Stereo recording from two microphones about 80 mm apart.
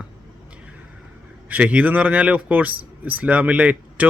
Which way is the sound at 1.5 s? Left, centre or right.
Centre.